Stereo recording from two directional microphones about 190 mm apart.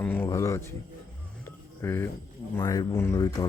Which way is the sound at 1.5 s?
10° left (ahead or behind).